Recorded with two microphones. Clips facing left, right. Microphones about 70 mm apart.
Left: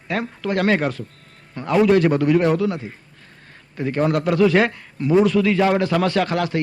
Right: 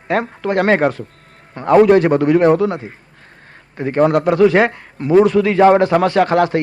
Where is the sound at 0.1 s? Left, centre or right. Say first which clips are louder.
Right 6 dB; right.